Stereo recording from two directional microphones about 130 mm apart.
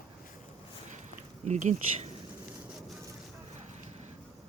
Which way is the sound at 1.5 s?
70° right (ahead or behind).